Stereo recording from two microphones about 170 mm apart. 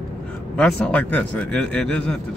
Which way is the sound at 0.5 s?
10° left (ahead or behind).